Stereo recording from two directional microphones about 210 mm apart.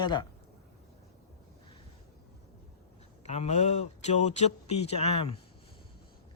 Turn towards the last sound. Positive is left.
turn(degrees=30)  # may be behind; listen again after turning